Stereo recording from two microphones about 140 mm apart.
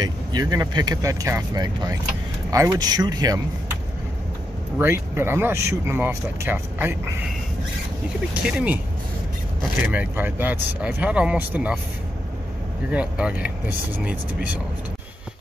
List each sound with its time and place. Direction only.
0.0 s speech: 25° right (ahead or behind)
4.7 s speech: 15° right (ahead or behind)
8.4 s speech: 10° right (ahead or behind)
9.9 s speech: 15° right (ahead or behind)
12.9 s speech: 10° right (ahead or behind)